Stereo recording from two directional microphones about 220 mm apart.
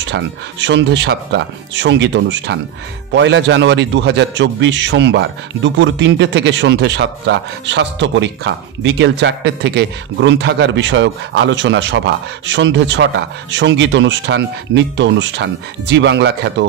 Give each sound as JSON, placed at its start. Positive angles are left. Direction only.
{"t": 0.0, "sound": "a man's voice", "side_deg": -55}